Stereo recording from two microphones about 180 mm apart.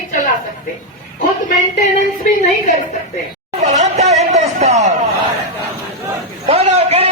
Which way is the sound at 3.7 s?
40° right (ahead or behind).